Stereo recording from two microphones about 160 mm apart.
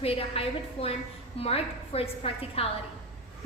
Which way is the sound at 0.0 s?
35° left (ahead or behind).